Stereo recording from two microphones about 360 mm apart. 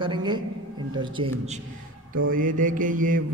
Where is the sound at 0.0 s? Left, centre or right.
Centre.